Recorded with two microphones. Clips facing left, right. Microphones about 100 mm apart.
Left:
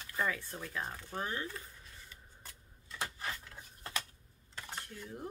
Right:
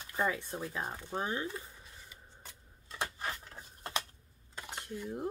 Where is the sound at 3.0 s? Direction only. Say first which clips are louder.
Right 3 dB; 25° right (ahead or behind).